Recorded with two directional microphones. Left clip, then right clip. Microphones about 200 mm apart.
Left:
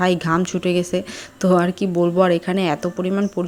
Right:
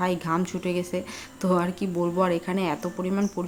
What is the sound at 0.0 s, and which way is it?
Speech, 25° left (ahead or behind).